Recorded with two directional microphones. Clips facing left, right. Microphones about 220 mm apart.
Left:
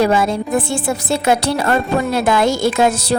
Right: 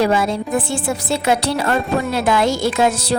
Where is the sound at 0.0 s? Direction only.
45° left (ahead or behind).